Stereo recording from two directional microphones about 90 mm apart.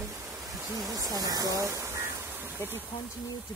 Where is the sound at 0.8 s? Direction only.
45° right (ahead or behind); by 2.8 s 25° right (ahead or behind).